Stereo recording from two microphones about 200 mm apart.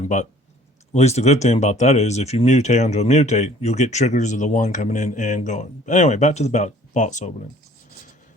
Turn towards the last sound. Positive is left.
turn(degrees=35)  # may be behind; listen again after turning